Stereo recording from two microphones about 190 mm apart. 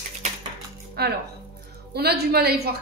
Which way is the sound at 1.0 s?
55° right (ahead or behind).